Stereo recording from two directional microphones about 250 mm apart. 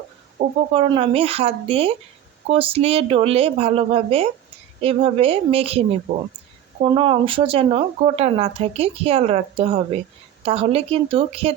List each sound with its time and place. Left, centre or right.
0.3 s speech: right